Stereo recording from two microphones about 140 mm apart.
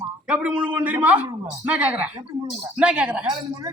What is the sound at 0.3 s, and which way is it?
Speech, 10° right (ahead or behind).